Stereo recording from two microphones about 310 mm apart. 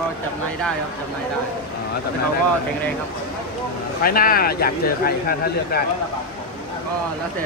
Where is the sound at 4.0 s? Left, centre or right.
Left.